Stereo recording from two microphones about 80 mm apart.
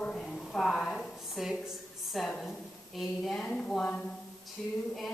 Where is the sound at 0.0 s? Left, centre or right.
Centre.